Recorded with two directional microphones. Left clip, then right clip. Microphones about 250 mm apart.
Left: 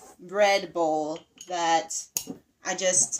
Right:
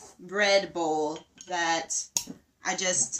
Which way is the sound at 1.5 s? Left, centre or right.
Right.